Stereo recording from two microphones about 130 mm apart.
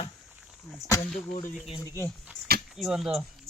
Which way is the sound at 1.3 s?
90° left.